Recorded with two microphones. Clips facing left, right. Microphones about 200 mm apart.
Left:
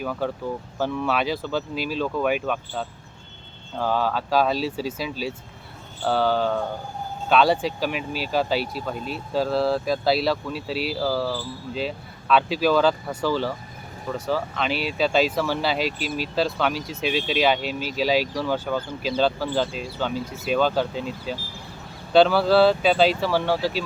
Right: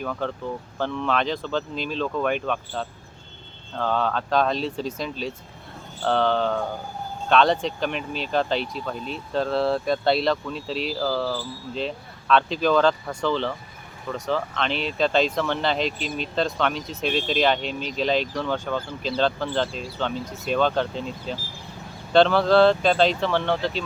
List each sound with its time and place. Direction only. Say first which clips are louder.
0.0 s speech: left 2 dB; 5° left (ahead or behind)